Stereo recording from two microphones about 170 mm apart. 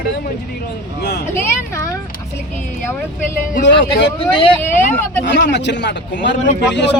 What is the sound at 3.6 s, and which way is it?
Speech, 90° left.